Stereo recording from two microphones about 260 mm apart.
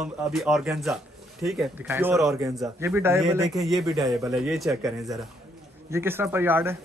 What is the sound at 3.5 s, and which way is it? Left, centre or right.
A man's voice, centre.